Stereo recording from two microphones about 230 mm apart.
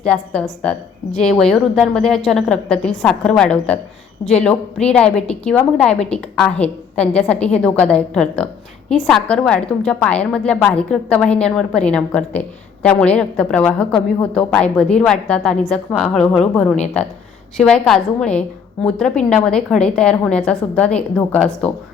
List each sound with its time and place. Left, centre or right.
0.0 s a woman's voice: centre